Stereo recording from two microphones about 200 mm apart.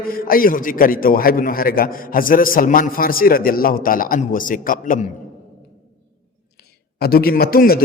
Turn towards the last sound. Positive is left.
turn(degrees=50)  # may be behind; listen again after turning